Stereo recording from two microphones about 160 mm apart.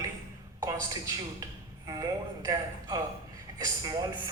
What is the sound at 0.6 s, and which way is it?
A woman's voice, 25° right (ahead or behind).